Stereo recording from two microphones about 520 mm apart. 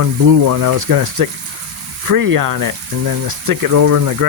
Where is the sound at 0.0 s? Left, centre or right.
Right.